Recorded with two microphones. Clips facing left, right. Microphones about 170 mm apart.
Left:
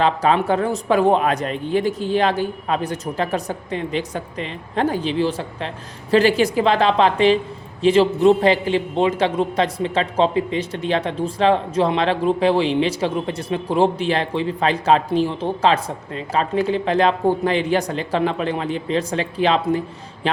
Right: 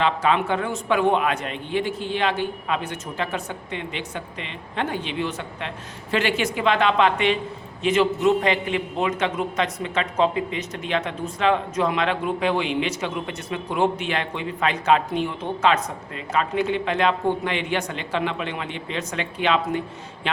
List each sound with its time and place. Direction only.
0.0 s a man's voice: 40° left (ahead or behind)